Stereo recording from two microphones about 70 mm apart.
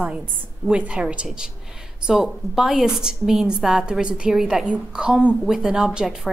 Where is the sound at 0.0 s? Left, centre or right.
Centre.